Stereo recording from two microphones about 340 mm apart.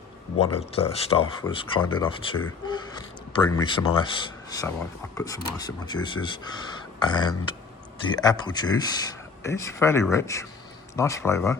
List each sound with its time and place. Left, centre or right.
0.3 s speech: centre